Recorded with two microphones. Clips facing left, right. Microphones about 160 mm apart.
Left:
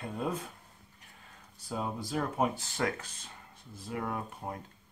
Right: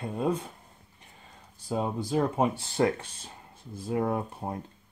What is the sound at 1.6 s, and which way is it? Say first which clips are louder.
Speech: right 6 dB; 30° right (ahead or behind).